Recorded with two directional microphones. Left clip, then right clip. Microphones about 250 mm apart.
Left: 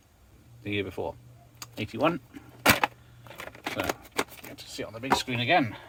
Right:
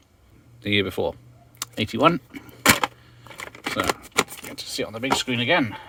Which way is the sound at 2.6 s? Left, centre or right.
Centre.